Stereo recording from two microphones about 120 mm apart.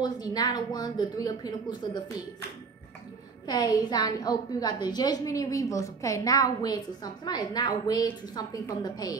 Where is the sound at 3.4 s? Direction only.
30° left (ahead or behind).